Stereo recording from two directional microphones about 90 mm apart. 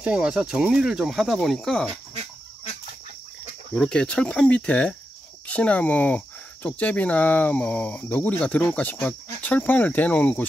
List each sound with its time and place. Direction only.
0.0 s speech: 10° right (ahead or behind)
3.7 s speech: 10° left (ahead or behind)